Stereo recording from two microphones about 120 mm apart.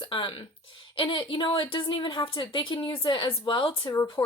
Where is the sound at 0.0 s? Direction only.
40° left (ahead or behind).